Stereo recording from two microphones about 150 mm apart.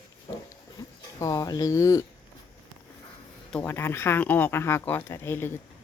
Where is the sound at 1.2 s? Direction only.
25° left (ahead or behind).